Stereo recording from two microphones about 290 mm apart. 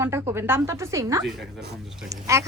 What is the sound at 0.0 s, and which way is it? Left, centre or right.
A woman's voice, centre.